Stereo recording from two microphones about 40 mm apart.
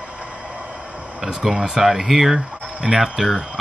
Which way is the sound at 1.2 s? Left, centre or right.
Centre.